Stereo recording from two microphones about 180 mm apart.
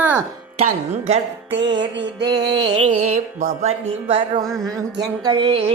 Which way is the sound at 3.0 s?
45° right (ahead or behind).